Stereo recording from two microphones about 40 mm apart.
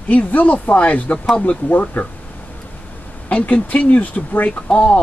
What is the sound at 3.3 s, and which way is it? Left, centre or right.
Speech, left.